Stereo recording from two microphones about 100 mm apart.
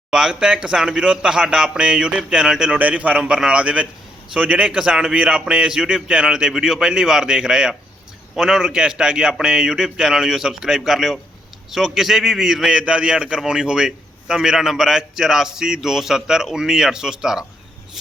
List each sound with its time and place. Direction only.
0.1 s a man's voice: 10° right (ahead or behind)